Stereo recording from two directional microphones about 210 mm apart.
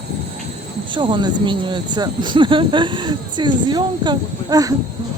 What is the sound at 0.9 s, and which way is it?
Speech, 25° right (ahead or behind).